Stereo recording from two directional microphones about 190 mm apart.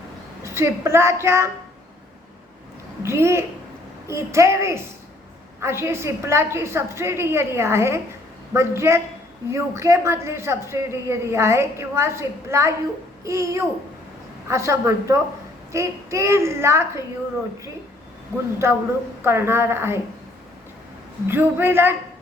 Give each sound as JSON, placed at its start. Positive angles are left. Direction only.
{"t": 0.4, "sound": "a woman's voice", "side_deg": -15}
{"t": 3.0, "sound": "a woman's voice", "side_deg": -15}
{"t": 18.6, "sound": "a woman's voice", "side_deg": -15}
{"t": 21.2, "sound": "a woman's voice", "side_deg": -10}